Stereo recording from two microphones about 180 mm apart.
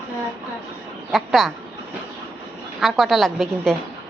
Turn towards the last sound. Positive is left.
turn(degrees=0)  # may be behind; listen again after turning